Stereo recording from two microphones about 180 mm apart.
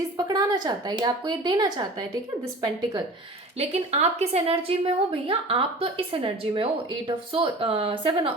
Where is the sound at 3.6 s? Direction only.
35° right (ahead or behind).